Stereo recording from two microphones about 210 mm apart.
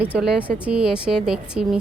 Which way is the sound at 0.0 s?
5° right (ahead or behind).